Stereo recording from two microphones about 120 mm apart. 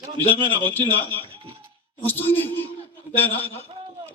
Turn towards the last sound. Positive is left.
turn(degrees=15)  # may be behind; listen again after turning